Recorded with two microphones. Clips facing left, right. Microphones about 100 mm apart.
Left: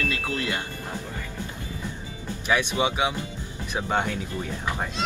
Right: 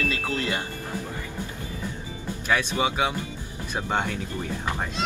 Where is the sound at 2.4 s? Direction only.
15° left (ahead or behind).